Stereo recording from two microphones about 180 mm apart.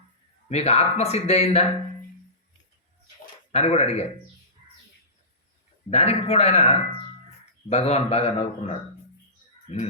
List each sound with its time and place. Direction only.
0.4 s speech: 35° left (ahead or behind)
3.5 s speech: 35° left (ahead or behind)
5.9 s speech: 35° left (ahead or behind)